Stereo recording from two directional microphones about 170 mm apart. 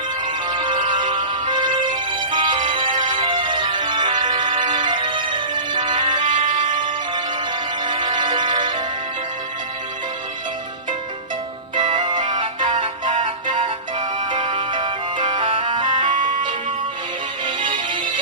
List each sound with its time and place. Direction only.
0.4 s music: 30° right (ahead or behind)
6.4 s music: 50° right (ahead or behind)
7.9 s music: 30° right (ahead or behind)
11.7 s music: 25° right (ahead or behind)